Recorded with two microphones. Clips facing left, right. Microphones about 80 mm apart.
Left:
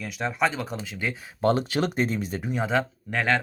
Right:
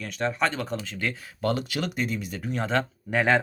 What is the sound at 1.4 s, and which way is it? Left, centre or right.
Speech, left.